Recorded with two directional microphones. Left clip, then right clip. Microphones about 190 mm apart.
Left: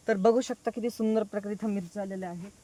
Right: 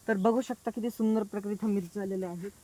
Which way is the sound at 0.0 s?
40° left (ahead or behind).